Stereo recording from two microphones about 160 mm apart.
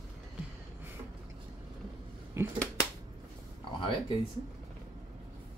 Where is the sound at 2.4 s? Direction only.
15° right (ahead or behind).